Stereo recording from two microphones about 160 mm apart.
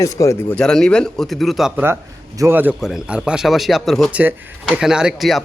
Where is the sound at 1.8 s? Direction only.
15° right (ahead or behind).